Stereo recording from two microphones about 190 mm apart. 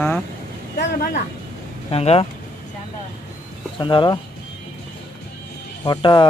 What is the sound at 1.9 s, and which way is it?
Speech, 30° left (ahead or behind).